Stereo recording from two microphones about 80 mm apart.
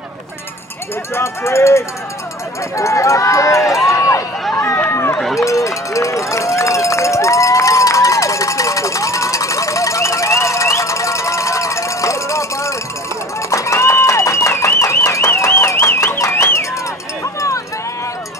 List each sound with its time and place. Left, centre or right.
1.1 s speech: left
5.4 s run: left
13.5 s a sound: left